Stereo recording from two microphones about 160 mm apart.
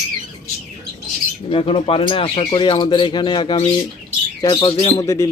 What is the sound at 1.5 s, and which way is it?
Speech, 35° left (ahead or behind).